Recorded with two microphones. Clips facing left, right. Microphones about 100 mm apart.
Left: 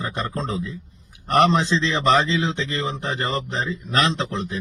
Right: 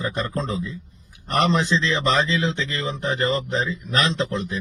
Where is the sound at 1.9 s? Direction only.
10° left (ahead or behind).